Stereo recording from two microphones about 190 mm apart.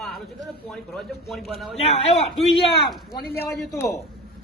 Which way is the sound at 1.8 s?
30° left (ahead or behind).